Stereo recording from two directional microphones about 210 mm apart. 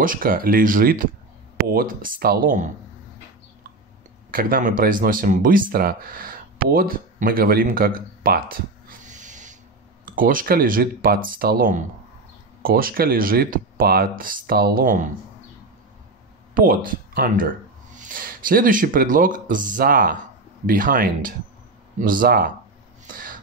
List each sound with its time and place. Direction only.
0.0 s speech: 40° right (ahead or behind)
4.3 s speech: 45° right (ahead or behind)
16.5 s speech: 40° right (ahead or behind)
23.1 s a sound: 40° right (ahead or behind)